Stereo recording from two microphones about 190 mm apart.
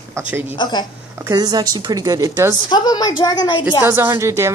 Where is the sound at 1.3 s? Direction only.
20° right (ahead or behind).